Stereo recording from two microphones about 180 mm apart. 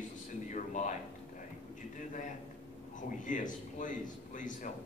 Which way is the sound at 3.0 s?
45° left (ahead or behind).